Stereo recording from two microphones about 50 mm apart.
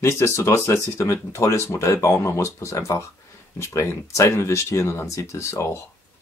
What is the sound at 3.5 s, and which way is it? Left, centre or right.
Speech, left.